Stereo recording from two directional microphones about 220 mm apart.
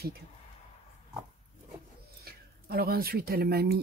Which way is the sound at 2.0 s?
45° right (ahead or behind).